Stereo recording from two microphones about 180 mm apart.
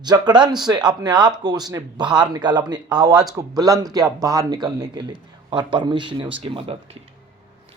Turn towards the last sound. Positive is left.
turn(degrees=-35)  # may be behind; listen again after turning